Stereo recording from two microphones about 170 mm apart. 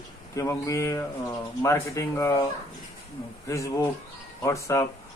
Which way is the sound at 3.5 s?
20° left (ahead or behind).